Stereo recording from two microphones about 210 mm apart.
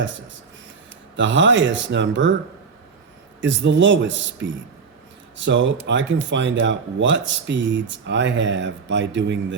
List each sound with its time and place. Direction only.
1.1 s speech: 60° right (ahead or behind)
3.4 s speech: 60° right (ahead or behind)